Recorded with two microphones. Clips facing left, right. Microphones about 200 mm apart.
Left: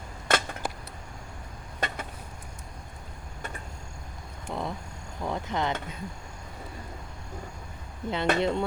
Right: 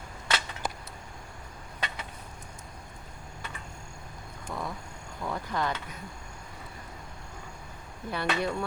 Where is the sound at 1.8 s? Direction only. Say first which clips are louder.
Left 5 dB; 50° left (ahead or behind).